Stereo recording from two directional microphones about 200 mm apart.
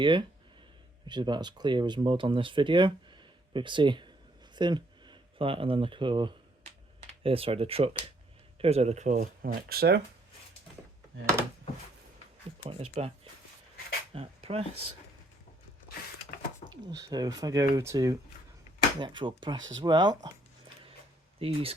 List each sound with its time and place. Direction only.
0.0 s speech: 25° right (ahead or behind); by 10.0 s 50° right (ahead or behind)
12.6 s speech: 30° right (ahead or behind)
14.1 s speech: 30° right (ahead or behind)
16.6 s speech: 20° right (ahead or behind)
19.5 s speech: 70° right (ahead or behind)
19.8 s speech: 20° right (ahead or behind)
21.3 s speech: 30° right (ahead or behind)